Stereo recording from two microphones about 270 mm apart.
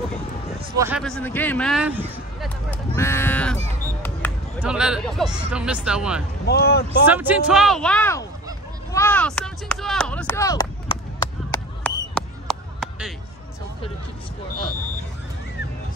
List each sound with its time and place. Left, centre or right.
0.7 s speech: centre
1.0 s speech: centre
3.0 s speech: centre
4.6 s speech: centre
6.4 s speech: left
7.1 s speech: centre
11.5 s a sound: centre